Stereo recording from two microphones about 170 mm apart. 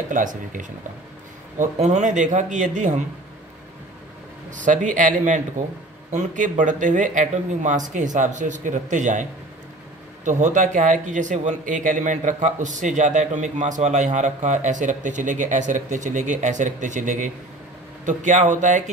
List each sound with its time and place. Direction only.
0.1 s speech: 50° right (ahead or behind)
4.5 s speech: 50° right (ahead or behind)
10.2 s speech: 45° right (ahead or behind)